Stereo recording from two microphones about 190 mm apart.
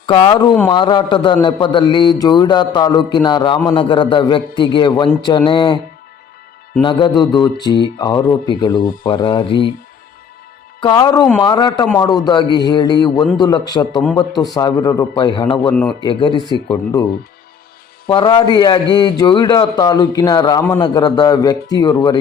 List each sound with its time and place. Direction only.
0.0 s a man's voice: 30° left (ahead or behind)
6.8 s a man's voice: 25° left (ahead or behind)
10.8 s a man's voice: 20° left (ahead or behind)
18.1 s a man's voice: 25° left (ahead or behind)